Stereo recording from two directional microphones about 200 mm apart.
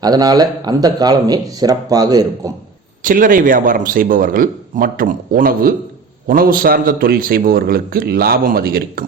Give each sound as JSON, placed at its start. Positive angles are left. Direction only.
{"t": 0.0, "sound": "speech", "side_deg": -20}
{"t": 3.0, "sound": "a man's voice", "side_deg": -45}